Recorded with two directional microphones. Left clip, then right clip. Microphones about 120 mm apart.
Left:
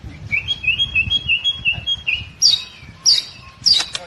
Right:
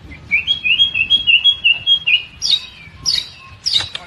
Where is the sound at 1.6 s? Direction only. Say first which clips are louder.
Right 6 dB; centre (ahead or behind).